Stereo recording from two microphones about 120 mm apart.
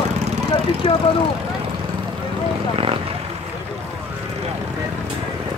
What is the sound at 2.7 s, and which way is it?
Vehicle, 50° right (ahead or behind).